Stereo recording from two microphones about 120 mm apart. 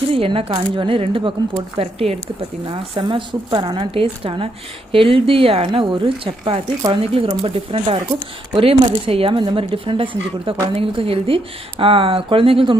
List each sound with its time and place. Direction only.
0.1 s speech: 50° right (ahead or behind)